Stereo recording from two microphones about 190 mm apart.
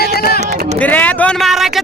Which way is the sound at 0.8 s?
10° left (ahead or behind).